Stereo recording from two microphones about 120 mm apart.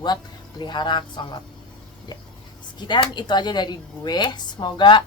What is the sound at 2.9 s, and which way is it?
Speech, 40° left (ahead or behind).